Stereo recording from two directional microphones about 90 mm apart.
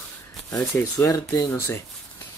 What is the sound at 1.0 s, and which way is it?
Speech, 40° left (ahead or behind).